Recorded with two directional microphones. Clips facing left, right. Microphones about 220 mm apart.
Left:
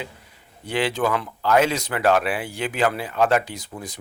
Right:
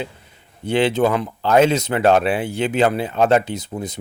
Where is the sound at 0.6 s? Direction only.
25° right (ahead or behind).